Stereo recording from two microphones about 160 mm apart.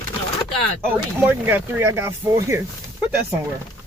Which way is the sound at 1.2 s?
10° right (ahead or behind).